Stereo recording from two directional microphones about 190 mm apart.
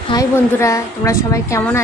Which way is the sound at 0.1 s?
15° left (ahead or behind).